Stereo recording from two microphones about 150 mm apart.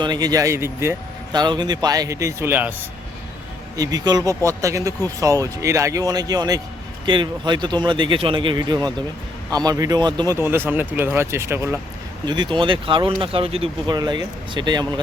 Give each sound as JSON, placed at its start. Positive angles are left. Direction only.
{"t": 0.0, "sound": "speech", "side_deg": -25}
{"t": 1.3, "sound": "speech", "side_deg": -30}
{"t": 3.8, "sound": "speech", "side_deg": -25}
{"t": 10.3, "sound": "speech", "side_deg": -15}
{"t": 12.2, "sound": "speech", "side_deg": -30}
{"t": 13.9, "sound": "speech", "side_deg": -30}